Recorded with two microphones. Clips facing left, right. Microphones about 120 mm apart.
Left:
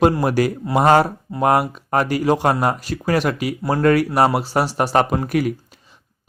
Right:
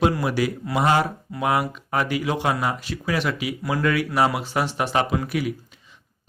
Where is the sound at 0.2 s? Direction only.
45° left (ahead or behind).